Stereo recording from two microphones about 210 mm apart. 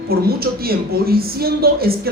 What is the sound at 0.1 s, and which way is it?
A man's voice, 45° right (ahead or behind).